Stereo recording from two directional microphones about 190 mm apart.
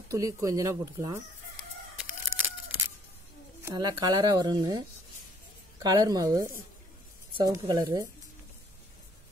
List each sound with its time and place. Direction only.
0.1 s speech: 15° right (ahead or behind)
2.0 s scissors: 10° right (ahead or behind)
3.6 s speech: 20° right (ahead or behind)